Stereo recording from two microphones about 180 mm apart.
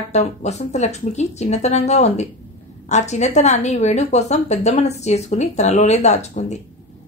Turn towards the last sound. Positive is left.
turn(degrees=40)  # may be behind; listen again after turning